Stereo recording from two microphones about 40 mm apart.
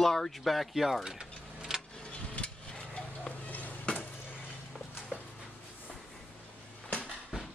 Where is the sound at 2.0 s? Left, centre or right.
Left.